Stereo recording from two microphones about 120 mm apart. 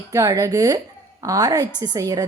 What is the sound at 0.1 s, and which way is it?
A woman's voice, 25° right (ahead or behind).